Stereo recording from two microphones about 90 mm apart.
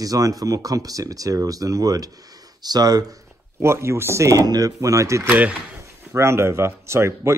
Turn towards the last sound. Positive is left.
turn(degrees=-30)  # may be behind; listen again after turning